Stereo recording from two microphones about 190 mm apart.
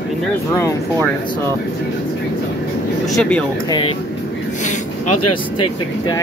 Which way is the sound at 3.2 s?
5° left (ahead or behind).